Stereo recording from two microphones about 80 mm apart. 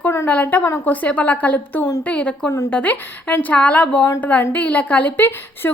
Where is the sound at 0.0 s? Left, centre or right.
Left.